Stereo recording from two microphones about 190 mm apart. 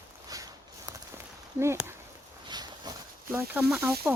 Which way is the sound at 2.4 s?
20° right (ahead or behind).